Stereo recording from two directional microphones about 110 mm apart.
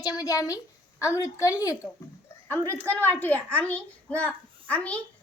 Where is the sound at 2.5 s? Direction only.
15° left (ahead or behind).